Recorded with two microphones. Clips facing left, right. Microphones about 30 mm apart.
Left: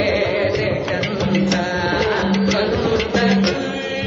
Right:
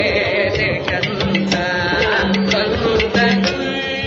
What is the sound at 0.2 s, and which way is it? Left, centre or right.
Music, right.